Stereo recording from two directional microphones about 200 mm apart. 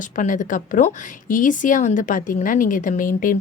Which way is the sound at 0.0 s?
40° left (ahead or behind).